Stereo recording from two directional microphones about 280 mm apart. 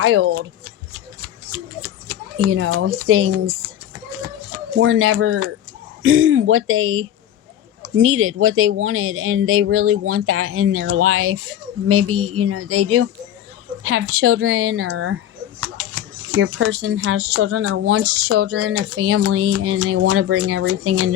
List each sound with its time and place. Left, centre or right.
0.0 s speech: right
1.5 s speech: right
4.2 s a sound: right
6.0 s speech: right